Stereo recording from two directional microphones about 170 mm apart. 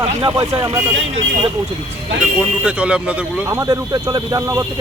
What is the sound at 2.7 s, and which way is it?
Speech, 5° right (ahead or behind).